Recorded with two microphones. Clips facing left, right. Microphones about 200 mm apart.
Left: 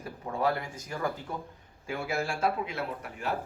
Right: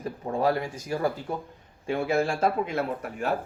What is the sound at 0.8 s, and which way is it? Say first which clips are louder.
A man's voice: right 5 dB; 35° right (ahead or behind).